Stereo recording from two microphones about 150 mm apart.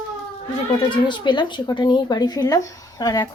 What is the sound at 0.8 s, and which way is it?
Speech, 30° left (ahead or behind).